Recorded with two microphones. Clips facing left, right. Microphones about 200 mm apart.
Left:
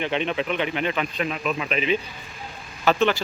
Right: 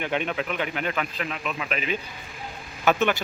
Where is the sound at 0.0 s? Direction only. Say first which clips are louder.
Left 2 dB; 5° right (ahead or behind).